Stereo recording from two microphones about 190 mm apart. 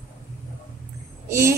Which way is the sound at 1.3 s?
15° right (ahead or behind).